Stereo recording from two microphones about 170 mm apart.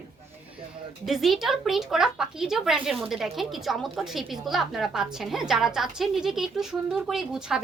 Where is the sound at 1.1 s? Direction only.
Centre (ahead or behind).